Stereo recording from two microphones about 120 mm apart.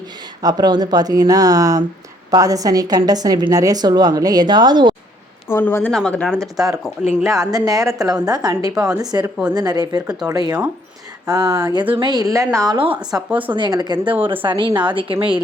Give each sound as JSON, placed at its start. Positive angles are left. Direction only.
{"t": 0.4, "sound": "a woman's voice", "side_deg": -35}
{"t": 5.5, "sound": "speech", "side_deg": 20}
{"t": 6.4, "sound": "a woman's voice", "side_deg": -30}
{"t": 12.9, "sound": "speech", "side_deg": -10}
{"t": 13.6, "sound": "a woman's voice", "side_deg": -35}